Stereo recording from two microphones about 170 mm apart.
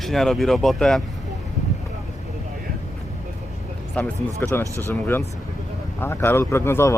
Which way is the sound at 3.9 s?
10° left (ahead or behind).